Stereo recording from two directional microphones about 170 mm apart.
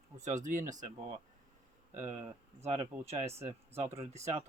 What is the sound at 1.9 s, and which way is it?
Speech, 45° right (ahead or behind).